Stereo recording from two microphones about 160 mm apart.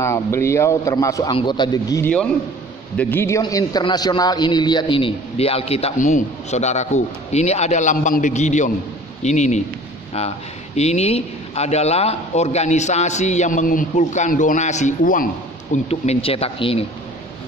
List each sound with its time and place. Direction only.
0.0 s a man's voice: 15° left (ahead or behind); by 9.6 s 45° left (ahead or behind)
10.8 s a man's voice: 40° left (ahead or behind)
15.7 s a man's voice: 40° left (ahead or behind)